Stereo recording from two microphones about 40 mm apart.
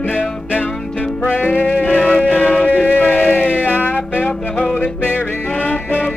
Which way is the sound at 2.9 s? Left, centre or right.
Left.